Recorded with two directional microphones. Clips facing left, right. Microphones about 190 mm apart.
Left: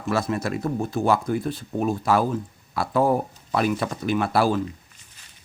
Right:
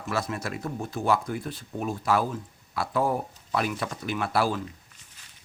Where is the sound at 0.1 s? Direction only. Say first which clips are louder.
Left 6 dB; 35° left (ahead or behind).